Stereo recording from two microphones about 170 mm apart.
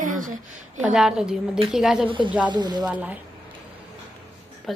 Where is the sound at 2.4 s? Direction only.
25° right (ahead or behind).